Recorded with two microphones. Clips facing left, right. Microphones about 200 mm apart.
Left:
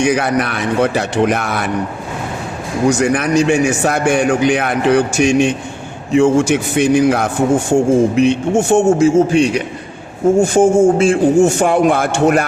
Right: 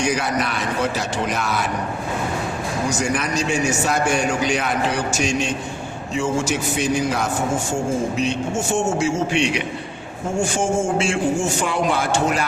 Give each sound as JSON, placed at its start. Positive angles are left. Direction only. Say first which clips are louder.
{"t": 0.0, "sound": "a man's voice", "louder": "left 7 dB", "side_deg": 60}
{"t": 3.0, "sound": "a man's voice", "louder": "left 9 dB", "side_deg": 60}
{"t": 9.3, "sound": "a man's voice", "louder": "left 7 dB", "side_deg": 40}
{"t": 10.3, "sound": "a man's voice", "louder": "left 9 dB", "side_deg": 55}